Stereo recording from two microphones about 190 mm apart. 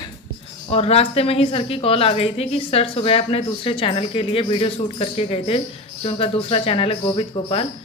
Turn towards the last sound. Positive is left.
turn(degrees=30)  # may be behind; listen again after turning